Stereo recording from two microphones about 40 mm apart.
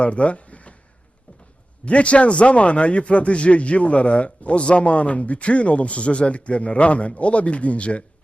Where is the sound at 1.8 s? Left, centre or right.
Left.